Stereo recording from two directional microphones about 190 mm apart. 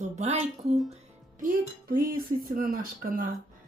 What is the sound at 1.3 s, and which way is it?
A woman's voice, 45° right (ahead or behind).